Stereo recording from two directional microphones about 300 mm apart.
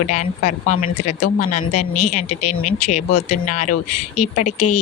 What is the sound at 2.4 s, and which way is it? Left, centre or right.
Speech, left.